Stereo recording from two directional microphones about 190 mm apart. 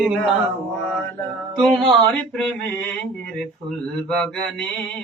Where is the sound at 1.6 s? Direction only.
Centre (ahead or behind).